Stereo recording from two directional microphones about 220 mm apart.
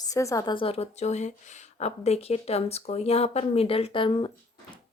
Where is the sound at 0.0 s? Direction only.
15° left (ahead or behind).